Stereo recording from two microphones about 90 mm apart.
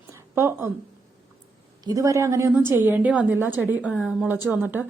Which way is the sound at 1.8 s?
40° right (ahead or behind).